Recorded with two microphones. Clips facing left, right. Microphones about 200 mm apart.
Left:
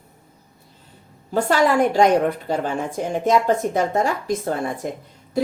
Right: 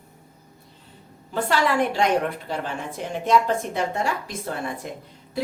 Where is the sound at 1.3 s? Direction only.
45° left (ahead or behind).